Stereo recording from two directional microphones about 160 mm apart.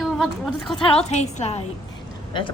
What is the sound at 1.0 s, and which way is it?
Speech, 45° left (ahead or behind).